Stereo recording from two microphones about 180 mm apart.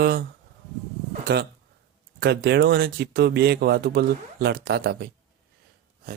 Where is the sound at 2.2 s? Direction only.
65° right (ahead or behind).